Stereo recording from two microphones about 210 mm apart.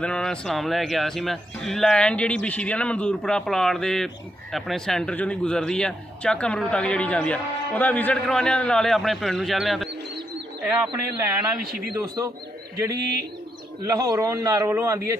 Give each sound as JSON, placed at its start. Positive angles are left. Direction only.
{"t": 0.0, "sound": "a man's voice", "side_deg": 5}
{"t": 11.6, "sound": "speech", "side_deg": -45}
{"t": 13.8, "sound": "a man's voice", "side_deg": -15}